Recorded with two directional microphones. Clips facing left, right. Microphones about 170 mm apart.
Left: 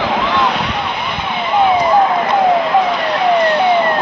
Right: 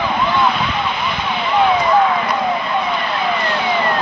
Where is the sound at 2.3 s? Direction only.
85° left; by 3.8 s 60° left (ahead or behind).